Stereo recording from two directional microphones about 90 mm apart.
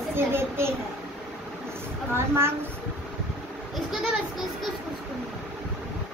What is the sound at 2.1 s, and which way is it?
Speech, 30° right (ahead or behind).